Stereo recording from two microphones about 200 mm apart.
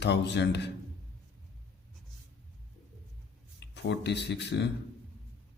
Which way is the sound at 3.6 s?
60° left (ahead or behind).